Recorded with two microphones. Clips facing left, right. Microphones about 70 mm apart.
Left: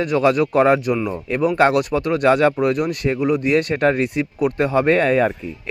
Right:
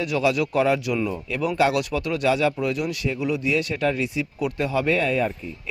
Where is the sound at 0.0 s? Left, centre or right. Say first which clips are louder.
Left 5 dB; left.